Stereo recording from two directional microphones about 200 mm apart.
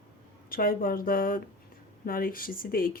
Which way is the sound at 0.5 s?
45° left (ahead or behind).